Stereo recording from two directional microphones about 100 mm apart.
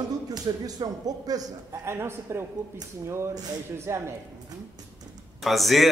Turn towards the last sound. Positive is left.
turn(degrees=0)  # may be behind; listen again after turning